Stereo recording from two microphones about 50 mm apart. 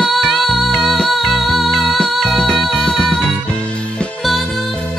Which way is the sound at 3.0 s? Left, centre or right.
Centre.